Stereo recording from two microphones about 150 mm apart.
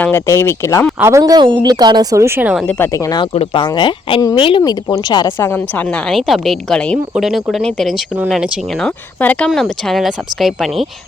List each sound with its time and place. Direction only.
0.0 s speech: 15° left (ahead or behind)
0.9 s speech: 20° right (ahead or behind)
2.6 s speech: 15° left (ahead or behind)
3.3 s speech: 40° left (ahead or behind)
5.5 s a woman's voice: 10° left (ahead or behind)
9.2 s a woman's voice: 10° left (ahead or behind)